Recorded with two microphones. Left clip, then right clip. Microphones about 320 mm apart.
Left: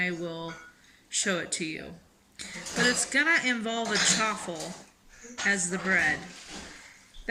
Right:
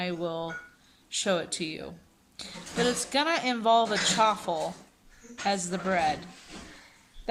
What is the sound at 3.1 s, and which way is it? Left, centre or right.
Speech, centre.